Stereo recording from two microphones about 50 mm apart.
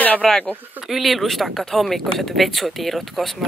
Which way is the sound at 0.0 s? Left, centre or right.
Left.